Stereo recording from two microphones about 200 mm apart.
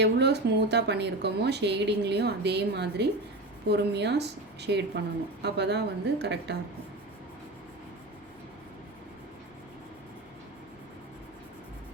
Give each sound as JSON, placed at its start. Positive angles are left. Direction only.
{"t": 0.0, "sound": "speech", "side_deg": -55}